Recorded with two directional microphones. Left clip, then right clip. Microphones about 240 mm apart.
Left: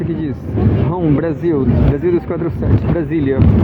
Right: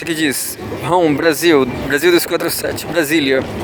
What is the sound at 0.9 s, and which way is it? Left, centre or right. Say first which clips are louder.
Speech: right 8 dB; right.